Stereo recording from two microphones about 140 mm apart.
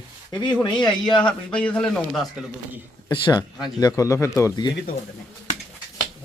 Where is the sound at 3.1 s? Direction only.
30° left (ahead or behind).